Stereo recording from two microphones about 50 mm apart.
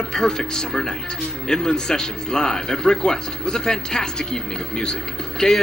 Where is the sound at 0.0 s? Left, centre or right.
Centre.